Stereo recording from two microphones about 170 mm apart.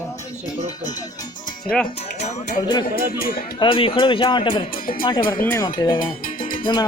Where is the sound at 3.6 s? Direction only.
30° left (ahead or behind).